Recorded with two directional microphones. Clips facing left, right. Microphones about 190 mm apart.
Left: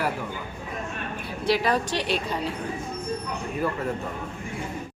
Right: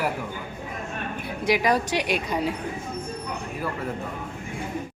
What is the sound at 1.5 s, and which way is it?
Speech, 10° right (ahead or behind).